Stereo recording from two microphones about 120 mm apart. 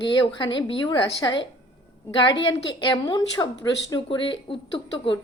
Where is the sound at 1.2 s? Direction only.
30° left (ahead or behind).